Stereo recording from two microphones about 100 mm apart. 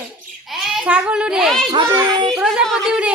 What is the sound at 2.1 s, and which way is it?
Speech, 50° right (ahead or behind).